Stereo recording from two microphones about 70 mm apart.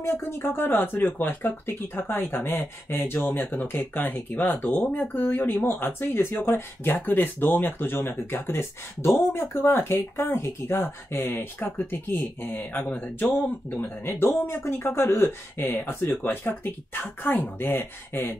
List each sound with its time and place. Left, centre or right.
0.0 s speech: left
14.5 s speech: left